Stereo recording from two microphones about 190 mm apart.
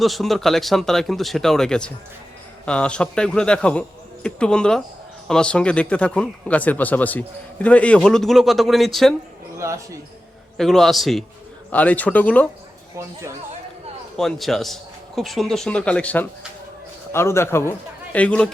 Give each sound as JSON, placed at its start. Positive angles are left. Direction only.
{"t": 0.0, "sound": "speech", "side_deg": 0}
{"t": 9.6, "sound": "speech", "side_deg": -15}
{"t": 10.6, "sound": "speech", "side_deg": 0}
{"t": 14.2, "sound": "a man's voice", "side_deg": 0}